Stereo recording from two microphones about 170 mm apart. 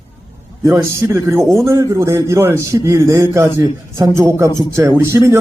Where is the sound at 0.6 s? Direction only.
15° right (ahead or behind).